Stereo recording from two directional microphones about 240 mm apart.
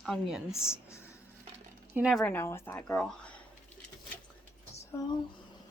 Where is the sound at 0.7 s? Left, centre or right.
Centre.